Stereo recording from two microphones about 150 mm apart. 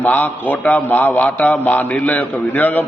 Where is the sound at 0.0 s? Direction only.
10° left (ahead or behind).